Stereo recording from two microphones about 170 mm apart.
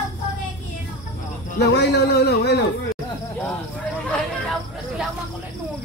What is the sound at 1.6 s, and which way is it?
A man's voice, 80° left.